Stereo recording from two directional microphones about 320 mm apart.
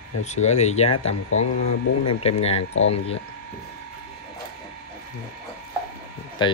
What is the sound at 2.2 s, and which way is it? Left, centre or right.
Speech, centre.